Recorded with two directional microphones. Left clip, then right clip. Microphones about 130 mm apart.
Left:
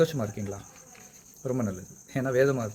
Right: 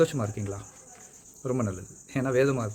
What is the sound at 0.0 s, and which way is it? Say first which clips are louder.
Speech: right 1 dB; 25° right (ahead or behind).